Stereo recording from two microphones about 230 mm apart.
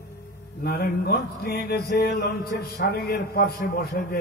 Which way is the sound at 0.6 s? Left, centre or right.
Left.